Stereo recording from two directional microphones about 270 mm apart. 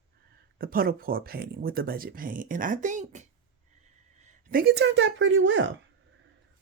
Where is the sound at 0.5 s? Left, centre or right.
Right.